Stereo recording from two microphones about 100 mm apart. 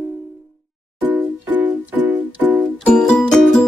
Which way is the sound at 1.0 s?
20° right (ahead or behind).